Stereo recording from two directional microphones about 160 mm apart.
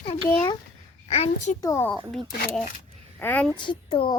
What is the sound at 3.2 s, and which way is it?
Speech, 10° left (ahead or behind).